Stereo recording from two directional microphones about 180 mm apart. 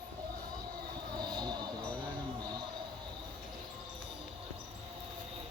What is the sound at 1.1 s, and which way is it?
Vehicle, 25° right (ahead or behind).